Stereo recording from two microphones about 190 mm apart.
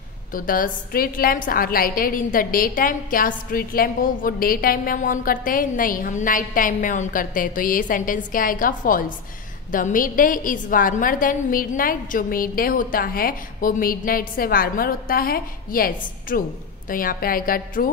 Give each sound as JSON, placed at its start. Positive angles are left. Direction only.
{"t": 0.3, "sound": "a woman's voice", "side_deg": 45}